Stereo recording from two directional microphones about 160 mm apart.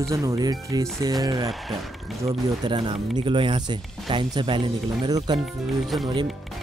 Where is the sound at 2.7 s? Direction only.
30° right (ahead or behind).